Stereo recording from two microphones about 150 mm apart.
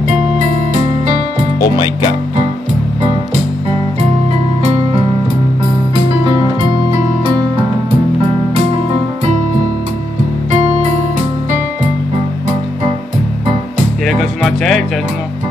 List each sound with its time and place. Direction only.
1.6 s speech: 30° left (ahead or behind)
14.0 s speech: centre (ahead or behind)